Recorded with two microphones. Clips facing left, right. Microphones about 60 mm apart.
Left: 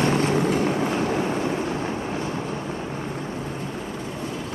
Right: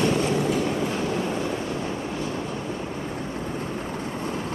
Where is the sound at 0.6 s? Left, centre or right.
Left.